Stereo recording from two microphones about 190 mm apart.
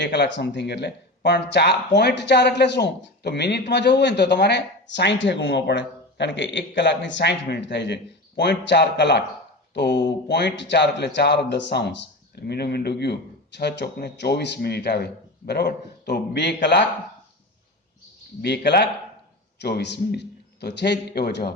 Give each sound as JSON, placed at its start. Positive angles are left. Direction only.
{"t": 0.0, "sound": "speech", "side_deg": 65}
{"t": 18.4, "sound": "speech", "side_deg": 60}